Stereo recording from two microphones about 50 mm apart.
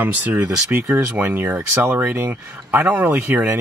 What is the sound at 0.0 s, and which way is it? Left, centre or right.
Speech, right.